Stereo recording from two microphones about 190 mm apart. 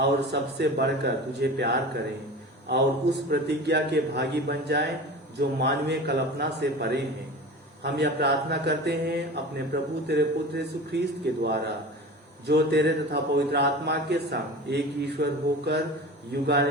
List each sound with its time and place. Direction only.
0.0 s a man's voice: 60° right (ahead or behind)